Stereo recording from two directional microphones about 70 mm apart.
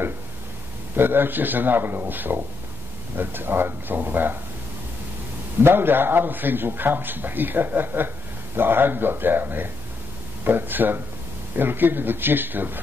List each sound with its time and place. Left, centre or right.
0.9 s a man's voice: right
5.6 s a man's voice: right